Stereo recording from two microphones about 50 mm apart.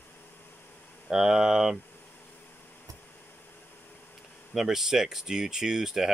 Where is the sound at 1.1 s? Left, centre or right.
Centre.